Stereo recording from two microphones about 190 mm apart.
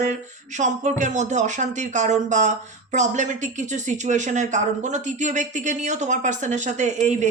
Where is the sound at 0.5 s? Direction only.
40° right (ahead or behind).